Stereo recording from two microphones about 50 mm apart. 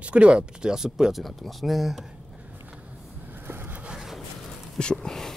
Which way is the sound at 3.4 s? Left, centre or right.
Right.